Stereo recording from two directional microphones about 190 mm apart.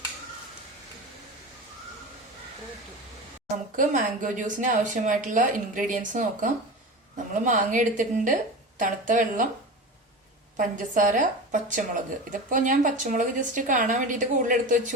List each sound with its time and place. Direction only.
3.8 s a woman's voice: 40° right (ahead or behind)
10.6 s a woman's voice: 45° right (ahead or behind)